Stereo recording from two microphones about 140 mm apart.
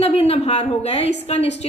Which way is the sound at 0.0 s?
45° left (ahead or behind).